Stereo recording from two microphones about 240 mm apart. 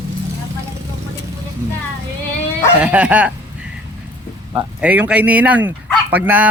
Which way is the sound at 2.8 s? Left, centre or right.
Centre.